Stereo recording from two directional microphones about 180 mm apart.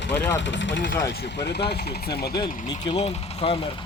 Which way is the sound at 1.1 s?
70° left (ahead or behind).